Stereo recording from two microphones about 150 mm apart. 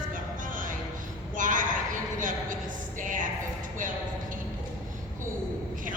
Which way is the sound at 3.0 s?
60° right (ahead or behind).